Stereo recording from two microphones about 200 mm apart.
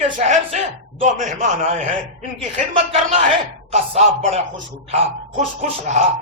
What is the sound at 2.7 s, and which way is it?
A man's voice, 30° right (ahead or behind).